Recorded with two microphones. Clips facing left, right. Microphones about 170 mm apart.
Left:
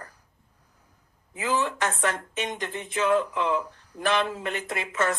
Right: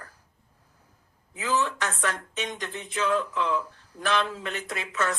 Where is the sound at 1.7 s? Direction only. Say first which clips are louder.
Left 3 dB; 50° left (ahead or behind).